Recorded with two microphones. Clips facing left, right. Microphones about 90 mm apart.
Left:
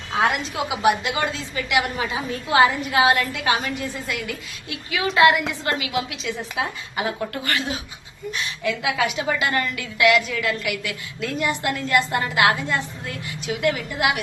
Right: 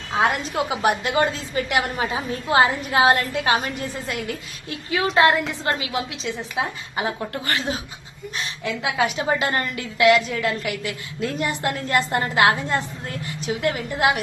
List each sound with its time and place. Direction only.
0.5 s a woman's voice: 40° right (ahead or behind)